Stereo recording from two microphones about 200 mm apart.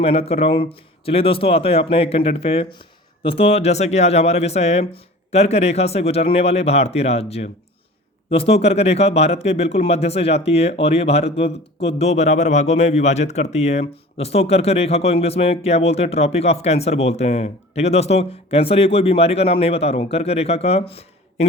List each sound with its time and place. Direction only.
0.0 s a man's voice: 30° left (ahead or behind)